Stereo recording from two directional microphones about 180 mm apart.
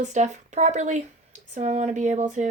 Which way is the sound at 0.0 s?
40° right (ahead or behind).